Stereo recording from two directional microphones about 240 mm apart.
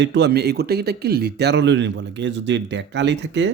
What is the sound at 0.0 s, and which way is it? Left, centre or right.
Speech, right.